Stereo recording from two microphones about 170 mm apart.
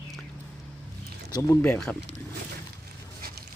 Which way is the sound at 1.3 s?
20° left (ahead or behind).